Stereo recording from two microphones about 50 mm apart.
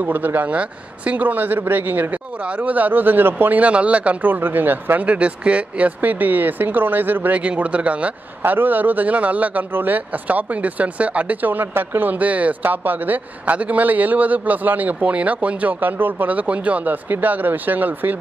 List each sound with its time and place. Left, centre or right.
0.0 s a man's voice: right
0.5 s speech: right
1.2 s a man's voice: right
2.4 s a man's voice: right
4.3 s speech: right
5.0 s a man's voice: right
7.4 s a man's voice: right
12.6 s a man's voice: right